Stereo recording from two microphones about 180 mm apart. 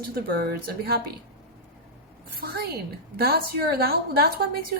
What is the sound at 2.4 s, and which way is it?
A woman's voice, 60° right (ahead or behind).